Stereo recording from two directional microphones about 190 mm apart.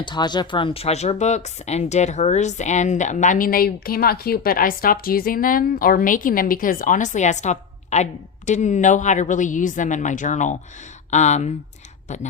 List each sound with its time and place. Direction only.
0.0 s speech: 25° left (ahead or behind)